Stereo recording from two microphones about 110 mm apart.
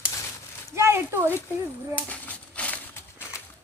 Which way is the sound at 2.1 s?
15° left (ahead or behind).